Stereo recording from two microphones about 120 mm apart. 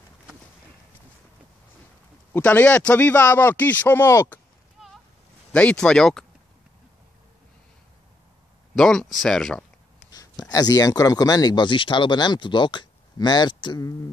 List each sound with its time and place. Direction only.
2.3 s speech: 15° left (ahead or behind)
4.7 s boat: centre (ahead or behind)
5.5 s speech: 10° left (ahead or behind)
8.7 s speech: 5° left (ahead or behind)
10.1 s speech: 30° left (ahead or behind)